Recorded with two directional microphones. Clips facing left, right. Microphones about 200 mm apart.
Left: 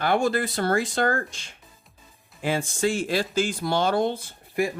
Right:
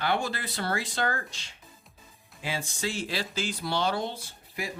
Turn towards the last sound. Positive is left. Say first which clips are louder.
# left 11 dB
turn(degrees=50)  # may be behind; listen again after turning